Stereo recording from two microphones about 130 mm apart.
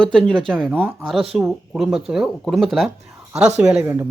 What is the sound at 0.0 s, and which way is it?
Speech, 5° left (ahead or behind).